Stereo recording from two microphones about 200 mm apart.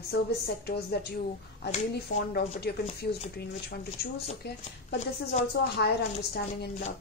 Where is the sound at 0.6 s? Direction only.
55° left (ahead or behind).